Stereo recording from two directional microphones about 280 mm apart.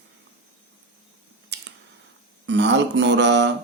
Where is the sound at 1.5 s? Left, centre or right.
Right.